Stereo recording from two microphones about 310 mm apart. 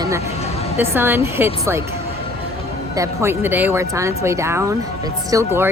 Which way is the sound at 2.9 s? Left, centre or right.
Centre.